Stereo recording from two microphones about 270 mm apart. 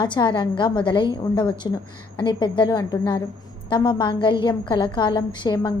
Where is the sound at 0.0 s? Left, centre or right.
Centre.